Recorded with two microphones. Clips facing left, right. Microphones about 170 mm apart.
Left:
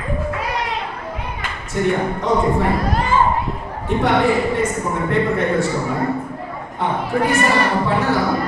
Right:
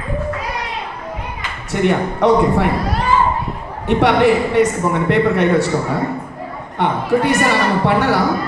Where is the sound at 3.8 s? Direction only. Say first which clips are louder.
Right 4 dB; 75° right (ahead or behind).